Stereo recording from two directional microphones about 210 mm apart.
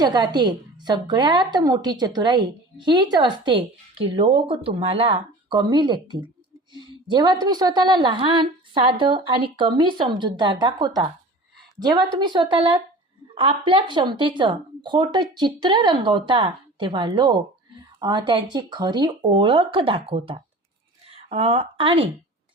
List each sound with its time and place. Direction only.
0.0 s a woman's voice: 20° right (ahead or behind)